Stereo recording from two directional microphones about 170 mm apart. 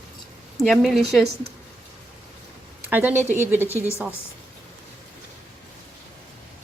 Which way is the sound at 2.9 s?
10° right (ahead or behind).